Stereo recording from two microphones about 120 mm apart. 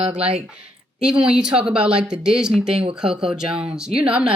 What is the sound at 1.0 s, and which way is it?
Speech, 10° right (ahead or behind).